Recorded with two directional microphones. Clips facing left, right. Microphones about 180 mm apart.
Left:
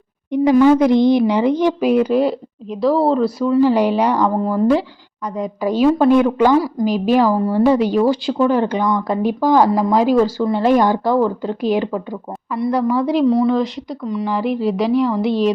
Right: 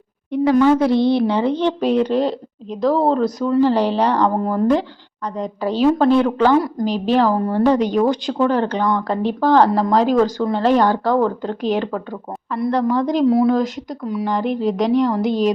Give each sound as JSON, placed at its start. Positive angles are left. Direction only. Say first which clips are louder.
{"t": 0.5, "sound": "speech", "louder": "left 3 dB", "side_deg": 15}
{"t": 13.2, "sound": "speech", "louder": "right 2 dB", "side_deg": -5}